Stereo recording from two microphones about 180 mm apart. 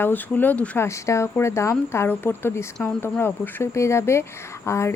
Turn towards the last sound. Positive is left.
turn(degrees=15)  # may be behind; listen again after turning